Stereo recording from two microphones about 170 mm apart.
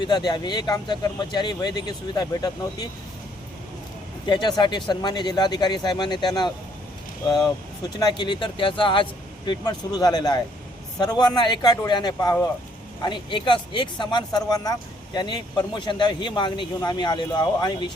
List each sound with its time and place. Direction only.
0.0 s speech: 25° left (ahead or behind)
4.3 s speech: 25° left (ahead or behind)
7.9 s speech: 25° left (ahead or behind)